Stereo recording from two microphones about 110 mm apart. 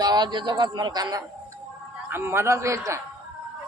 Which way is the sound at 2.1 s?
20° right (ahead or behind).